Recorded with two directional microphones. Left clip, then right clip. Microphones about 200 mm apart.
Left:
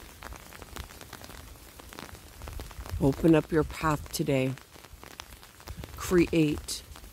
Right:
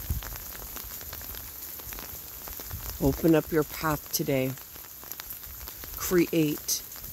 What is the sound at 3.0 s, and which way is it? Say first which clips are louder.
Speech: even; 10° left (ahead or behind).